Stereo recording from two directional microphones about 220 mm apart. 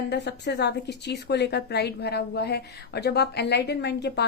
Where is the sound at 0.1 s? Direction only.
50° left (ahead or behind).